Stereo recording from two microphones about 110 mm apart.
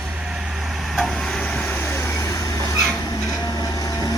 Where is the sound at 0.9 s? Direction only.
Centre (ahead or behind).